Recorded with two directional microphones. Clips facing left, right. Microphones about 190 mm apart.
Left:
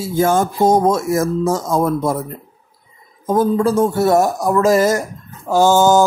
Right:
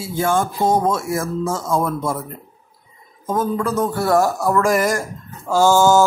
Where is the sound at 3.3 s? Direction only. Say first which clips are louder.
Left 6 dB; 35° left (ahead or behind).